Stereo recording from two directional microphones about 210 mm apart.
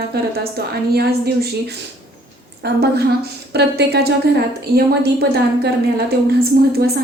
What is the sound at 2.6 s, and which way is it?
A woman's voice, 50° right (ahead or behind).